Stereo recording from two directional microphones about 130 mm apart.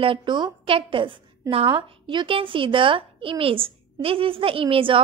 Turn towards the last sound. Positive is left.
turn(degrees=-45)  # may be behind; listen again after turning